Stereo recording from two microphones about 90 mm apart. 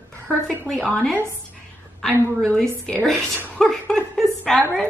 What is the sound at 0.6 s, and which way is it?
Speech, 10° left (ahead or behind).